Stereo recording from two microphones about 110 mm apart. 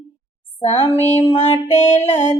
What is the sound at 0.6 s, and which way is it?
Female singing, 65° left (ahead or behind).